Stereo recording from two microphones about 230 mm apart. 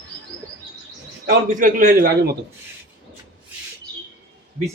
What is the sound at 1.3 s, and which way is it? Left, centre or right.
A man's voice, right.